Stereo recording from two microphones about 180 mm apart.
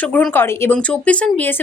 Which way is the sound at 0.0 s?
10° left (ahead or behind).